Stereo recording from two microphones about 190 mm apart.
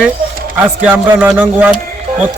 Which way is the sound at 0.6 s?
10° right (ahead or behind).